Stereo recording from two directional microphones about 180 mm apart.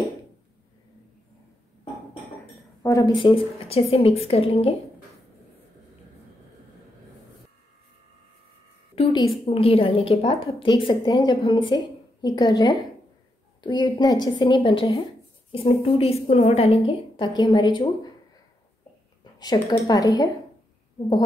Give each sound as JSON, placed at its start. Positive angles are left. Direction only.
{"t": 2.8, "sound": "speech", "side_deg": 15}
{"t": 3.2, "sound": "a woman's voice", "side_deg": 30}
{"t": 8.9, "sound": "a sound", "side_deg": 25}
{"t": 9.5, "sound": "a woman's voice", "side_deg": 35}
{"t": 19.3, "sound": "a woman's voice", "side_deg": 20}